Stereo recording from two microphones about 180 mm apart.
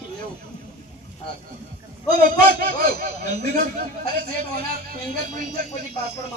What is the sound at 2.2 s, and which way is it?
A man's voice, 50° right (ahead or behind).